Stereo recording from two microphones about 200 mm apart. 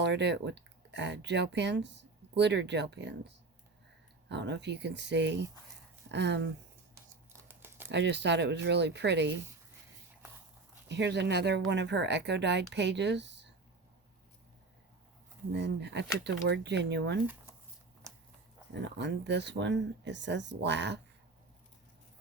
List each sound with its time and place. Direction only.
0.0 s speech: 60° right (ahead or behind)
7.4 s typing: 10° right (ahead or behind)
7.9 s speech: 60° right (ahead or behind)
10.8 s speech: 60° right (ahead or behind)
15.5 s speech: 60° right (ahead or behind)
18.7 s speech: 60° right (ahead or behind)